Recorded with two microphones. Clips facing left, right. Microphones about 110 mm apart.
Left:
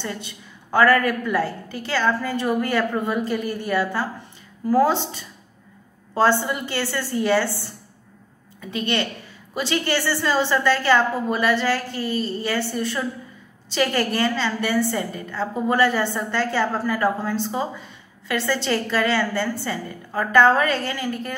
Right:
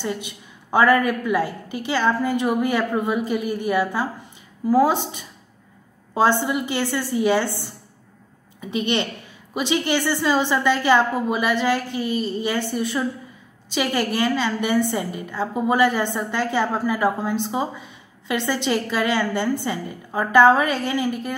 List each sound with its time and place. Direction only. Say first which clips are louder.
0.0 s a woman's voice: right 3 dB; 15° right (ahead or behind)